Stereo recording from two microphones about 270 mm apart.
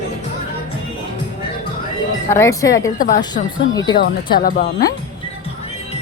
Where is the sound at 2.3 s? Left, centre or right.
Centre.